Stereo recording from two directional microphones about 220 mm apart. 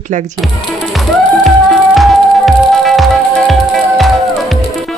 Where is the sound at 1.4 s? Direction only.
Centre (ahead or behind).